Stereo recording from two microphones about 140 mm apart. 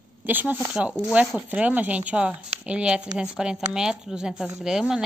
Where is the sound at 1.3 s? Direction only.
10° right (ahead or behind).